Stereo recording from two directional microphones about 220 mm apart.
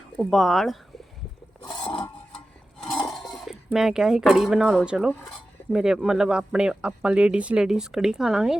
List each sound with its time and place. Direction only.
0.2 s speech: centre (ahead or behind)
1.8 s a sound: 25° left (ahead or behind)
3.2 s speech: centre (ahead or behind)